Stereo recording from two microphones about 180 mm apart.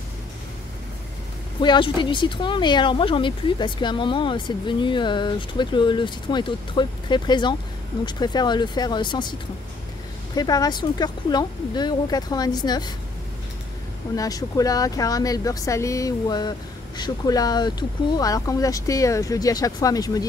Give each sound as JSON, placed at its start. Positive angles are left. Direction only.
{"t": 1.6, "sound": "speech", "side_deg": 25}
{"t": 10.3, "sound": "speech", "side_deg": 20}
{"t": 14.1, "sound": "speech", "side_deg": 20}